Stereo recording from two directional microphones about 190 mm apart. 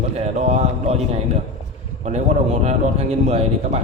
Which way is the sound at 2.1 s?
35° right (ahead or behind).